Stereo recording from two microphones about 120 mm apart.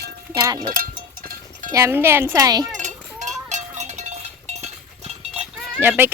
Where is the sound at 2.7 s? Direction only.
85° right; by 5.5 s 60° right (ahead or behind).